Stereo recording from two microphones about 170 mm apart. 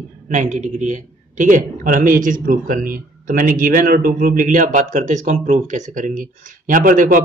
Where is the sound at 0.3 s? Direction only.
45° right (ahead or behind).